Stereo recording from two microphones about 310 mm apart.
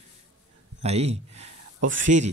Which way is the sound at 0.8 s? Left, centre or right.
Centre.